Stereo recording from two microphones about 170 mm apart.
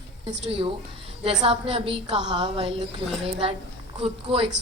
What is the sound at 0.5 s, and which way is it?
A man's voice, 30° right (ahead or behind).